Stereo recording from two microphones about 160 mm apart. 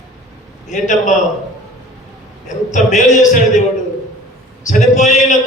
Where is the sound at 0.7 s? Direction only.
50° left (ahead or behind).